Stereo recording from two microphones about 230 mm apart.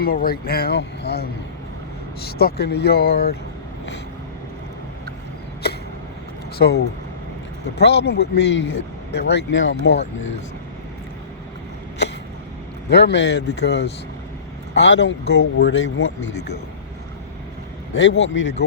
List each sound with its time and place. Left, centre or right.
0.0 s speech: left
5.6 s vehicle: left
6.6 s speech: left
12.9 s speech: left
17.9 s speech: left